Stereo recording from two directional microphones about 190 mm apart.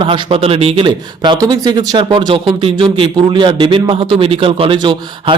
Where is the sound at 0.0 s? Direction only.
30° right (ahead or behind).